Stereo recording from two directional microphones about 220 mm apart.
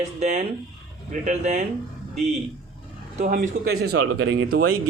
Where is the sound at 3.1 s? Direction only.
40° right (ahead or behind).